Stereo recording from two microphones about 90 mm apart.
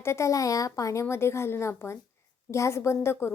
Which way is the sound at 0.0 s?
30° left (ahead or behind).